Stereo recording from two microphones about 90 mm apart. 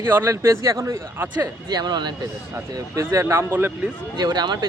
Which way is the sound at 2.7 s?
35° right (ahead or behind).